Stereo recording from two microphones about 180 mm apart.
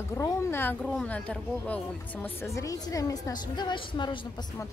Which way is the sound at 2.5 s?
20° left (ahead or behind).